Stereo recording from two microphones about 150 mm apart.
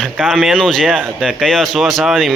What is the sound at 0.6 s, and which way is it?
Speech, 5° left (ahead or behind).